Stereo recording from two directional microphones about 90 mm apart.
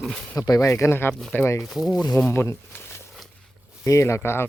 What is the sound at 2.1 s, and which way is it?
Speech, 20° left (ahead or behind).